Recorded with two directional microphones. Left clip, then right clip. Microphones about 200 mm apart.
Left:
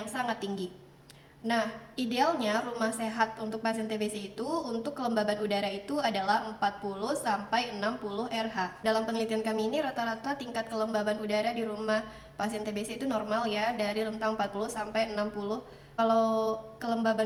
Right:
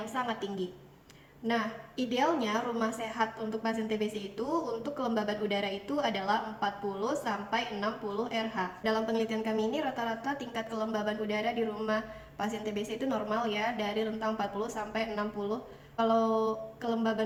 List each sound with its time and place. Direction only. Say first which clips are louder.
2.0 s a woman's voice: left 1 dB; 20° left (ahead or behind)